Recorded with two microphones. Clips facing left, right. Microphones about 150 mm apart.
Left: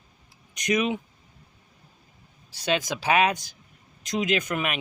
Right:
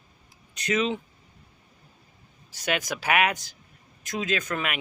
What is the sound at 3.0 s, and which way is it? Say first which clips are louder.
Speech: left 2 dB; 15° left (ahead or behind).